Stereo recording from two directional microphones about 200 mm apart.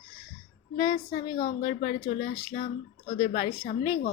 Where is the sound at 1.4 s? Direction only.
40° left (ahead or behind).